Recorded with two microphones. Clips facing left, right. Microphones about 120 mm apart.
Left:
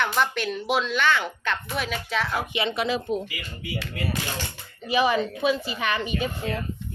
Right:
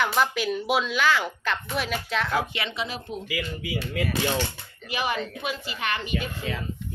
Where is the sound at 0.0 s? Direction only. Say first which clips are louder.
Right 1 dB; 5° right (ahead or behind).